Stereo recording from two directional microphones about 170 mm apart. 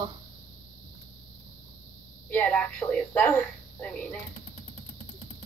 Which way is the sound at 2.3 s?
10° left (ahead or behind).